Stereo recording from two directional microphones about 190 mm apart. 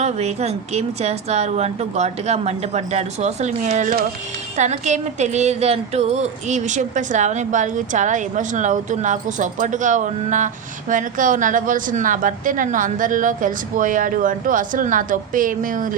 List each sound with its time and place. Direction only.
0.0 s a woman's voice: 35° right (ahead or behind)